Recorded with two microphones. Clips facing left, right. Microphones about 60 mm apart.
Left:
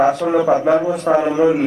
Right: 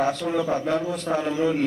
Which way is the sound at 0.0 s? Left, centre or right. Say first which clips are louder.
Left 9 dB; left.